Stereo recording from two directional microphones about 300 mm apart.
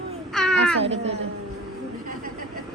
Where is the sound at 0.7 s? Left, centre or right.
Right.